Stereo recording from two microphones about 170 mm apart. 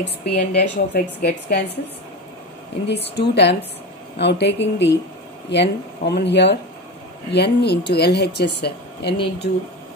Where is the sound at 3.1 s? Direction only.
85° left.